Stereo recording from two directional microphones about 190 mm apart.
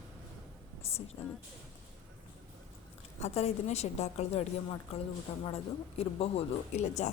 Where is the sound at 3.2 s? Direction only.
35° left (ahead or behind).